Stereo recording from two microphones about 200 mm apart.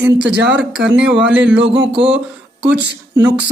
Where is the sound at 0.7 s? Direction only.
60° right (ahead or behind).